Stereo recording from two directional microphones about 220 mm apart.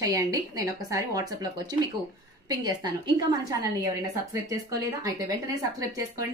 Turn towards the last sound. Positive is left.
turn(degrees=-15)  # may be behind; listen again after turning